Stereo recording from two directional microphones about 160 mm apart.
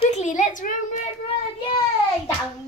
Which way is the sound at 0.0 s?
45° left (ahead or behind).